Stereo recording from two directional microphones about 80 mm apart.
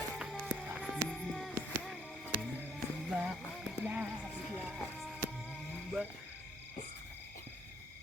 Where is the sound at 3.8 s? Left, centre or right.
Centre.